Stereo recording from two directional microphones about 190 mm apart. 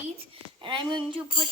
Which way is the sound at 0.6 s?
25° right (ahead or behind).